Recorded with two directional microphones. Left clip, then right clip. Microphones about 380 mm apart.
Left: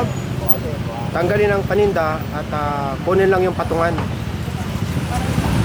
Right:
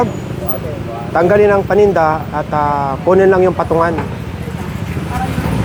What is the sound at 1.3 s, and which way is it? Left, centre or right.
Speech, right.